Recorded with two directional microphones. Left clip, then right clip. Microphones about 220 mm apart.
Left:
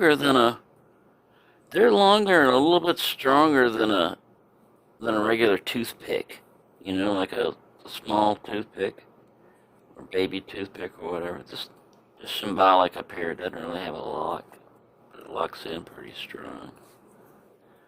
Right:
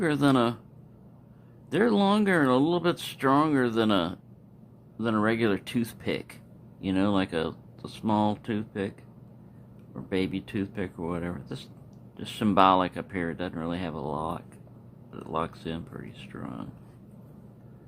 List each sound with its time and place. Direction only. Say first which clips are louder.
0.0 s speech: left 5 dB; 25° left (ahead or behind)
1.7 s speech: left 7 dB; 20° left (ahead or behind)
10.2 s speech: left 4 dB; 25° left (ahead or behind)